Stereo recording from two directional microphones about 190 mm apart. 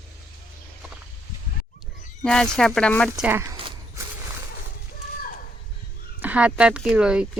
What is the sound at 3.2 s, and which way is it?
Speech, 15° right (ahead or behind).